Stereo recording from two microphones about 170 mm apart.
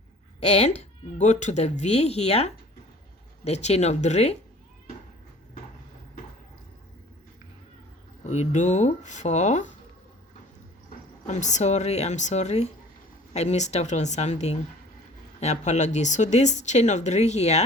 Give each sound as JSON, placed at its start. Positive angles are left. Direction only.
{"t": 0.3, "sound": "speech", "side_deg": 40}
{"t": 8.3, "sound": "speech", "side_deg": 45}
{"t": 11.3, "sound": "speech", "side_deg": 45}